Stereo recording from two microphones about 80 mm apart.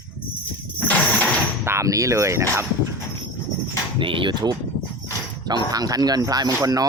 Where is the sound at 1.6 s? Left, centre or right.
Right.